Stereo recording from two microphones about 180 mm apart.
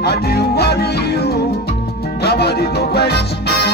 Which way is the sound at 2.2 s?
60° left (ahead or behind).